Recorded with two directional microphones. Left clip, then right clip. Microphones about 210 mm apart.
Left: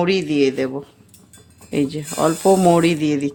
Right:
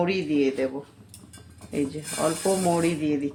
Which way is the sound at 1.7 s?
45° left (ahead or behind).